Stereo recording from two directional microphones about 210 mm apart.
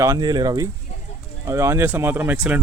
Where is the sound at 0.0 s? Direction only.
15° right (ahead or behind).